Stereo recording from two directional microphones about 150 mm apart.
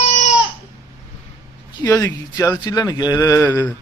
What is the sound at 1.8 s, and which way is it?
Speech, 20° left (ahead or behind).